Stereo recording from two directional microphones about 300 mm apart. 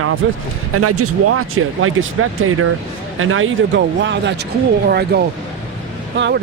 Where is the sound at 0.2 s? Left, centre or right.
Right.